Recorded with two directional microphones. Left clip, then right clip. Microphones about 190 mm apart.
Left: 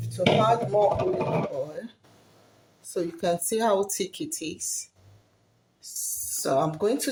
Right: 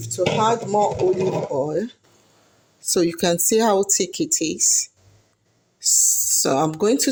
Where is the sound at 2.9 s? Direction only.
40° right (ahead or behind).